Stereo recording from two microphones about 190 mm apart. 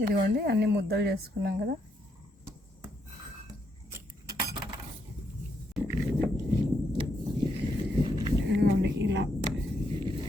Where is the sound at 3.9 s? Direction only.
20° right (ahead or behind).